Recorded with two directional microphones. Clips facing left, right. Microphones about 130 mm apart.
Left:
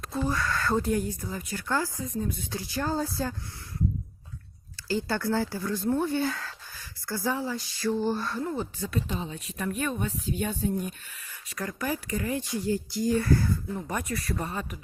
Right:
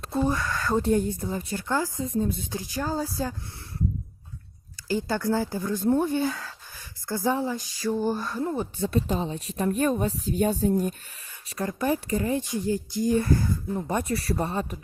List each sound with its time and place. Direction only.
0.0 s speech: 25° right (ahead or behind)
0.9 s speech: 25° right (ahead or behind); by 3.3 s 10° right (ahead or behind)
4.9 s speech: 15° right (ahead or behind); by 10.9 s 35° right (ahead or behind)
11.4 s speech: 25° right (ahead or behind)